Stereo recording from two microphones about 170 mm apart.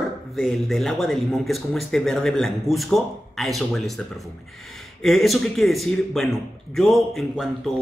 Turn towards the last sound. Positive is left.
turn(degrees=0)  # may be behind; listen again after turning